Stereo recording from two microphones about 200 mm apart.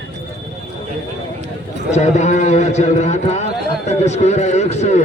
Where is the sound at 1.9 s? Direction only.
35° left (ahead or behind).